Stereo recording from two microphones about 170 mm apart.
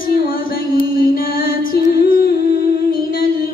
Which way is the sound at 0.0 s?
55° left (ahead or behind).